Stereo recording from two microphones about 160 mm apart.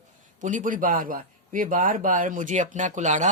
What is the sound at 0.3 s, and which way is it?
Speech, 55° right (ahead or behind).